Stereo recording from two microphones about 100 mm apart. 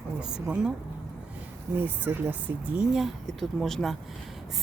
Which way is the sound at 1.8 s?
20° right (ahead or behind).